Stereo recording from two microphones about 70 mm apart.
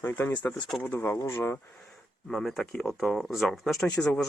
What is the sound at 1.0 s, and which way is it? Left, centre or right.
Speech, left.